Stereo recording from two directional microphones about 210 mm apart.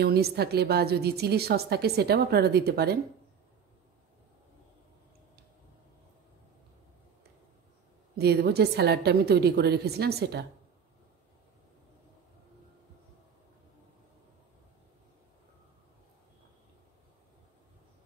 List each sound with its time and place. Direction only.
0.0 s a woman's voice: 50° right (ahead or behind)
8.2 s a woman's voice: 50° right (ahead or behind)